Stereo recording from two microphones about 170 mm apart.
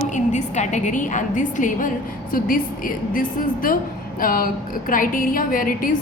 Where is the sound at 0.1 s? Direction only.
45° left (ahead or behind).